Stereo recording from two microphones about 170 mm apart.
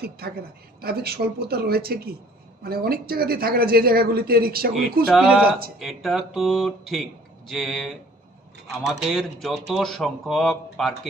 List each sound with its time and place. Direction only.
0.2 s a woman's voice: 65° right (ahead or behind)
5.1 s speech: 5° right (ahead or behind)